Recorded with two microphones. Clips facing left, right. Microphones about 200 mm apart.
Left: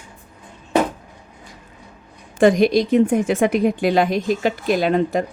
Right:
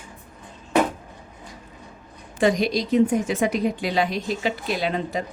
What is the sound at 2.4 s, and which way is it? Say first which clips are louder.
A woman's voice: left 7 dB; 55° left (ahead or behind).